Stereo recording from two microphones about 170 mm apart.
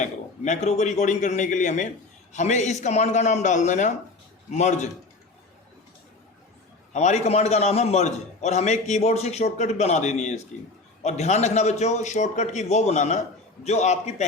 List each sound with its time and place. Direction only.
0.0 s a man's voice: 45° left (ahead or behind)
6.9 s a man's voice: 45° left (ahead or behind)